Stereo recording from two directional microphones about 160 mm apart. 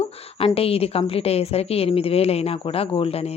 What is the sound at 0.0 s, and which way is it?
A woman's voice, 35° left (ahead or behind).